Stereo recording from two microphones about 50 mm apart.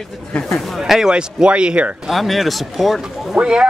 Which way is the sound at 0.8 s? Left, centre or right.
Centre.